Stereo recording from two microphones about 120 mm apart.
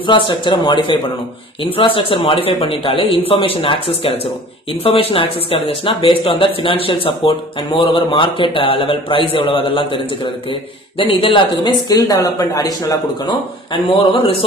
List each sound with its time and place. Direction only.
0.0 s speech: 45° left (ahead or behind)